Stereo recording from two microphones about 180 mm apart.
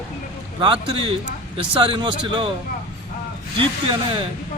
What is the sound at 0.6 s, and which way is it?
Speech, 30° right (ahead or behind).